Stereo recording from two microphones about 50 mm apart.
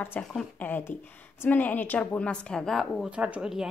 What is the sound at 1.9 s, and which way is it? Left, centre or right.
A woman's voice, left.